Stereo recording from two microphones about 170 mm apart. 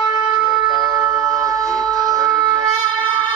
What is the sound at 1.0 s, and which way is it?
Music, 20° right (ahead or behind).